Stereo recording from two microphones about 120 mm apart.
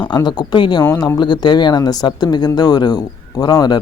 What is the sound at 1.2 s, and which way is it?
Speech, 35° left (ahead or behind).